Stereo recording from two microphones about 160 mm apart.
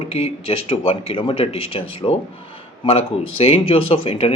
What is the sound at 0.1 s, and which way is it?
Speech, 40° left (ahead or behind).